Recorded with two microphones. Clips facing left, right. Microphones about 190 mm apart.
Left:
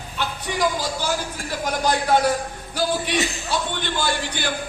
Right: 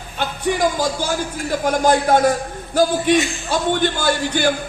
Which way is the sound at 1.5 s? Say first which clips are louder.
Right 7 dB; 45° right (ahead or behind).